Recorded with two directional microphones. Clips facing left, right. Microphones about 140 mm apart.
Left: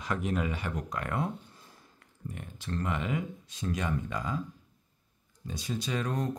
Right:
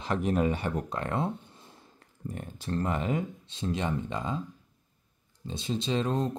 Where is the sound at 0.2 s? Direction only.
35° right (ahead or behind).